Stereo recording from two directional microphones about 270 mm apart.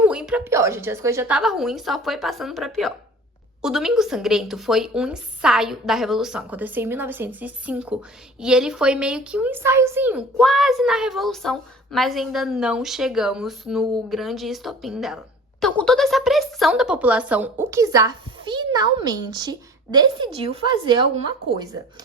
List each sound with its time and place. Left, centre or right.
0.0 s a woman's voice: centre